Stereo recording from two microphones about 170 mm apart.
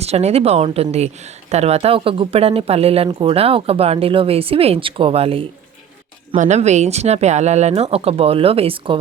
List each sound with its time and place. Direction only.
0.0 s a woman's voice: 40° right (ahead or behind)
6.3 s a woman's voice: 45° right (ahead or behind)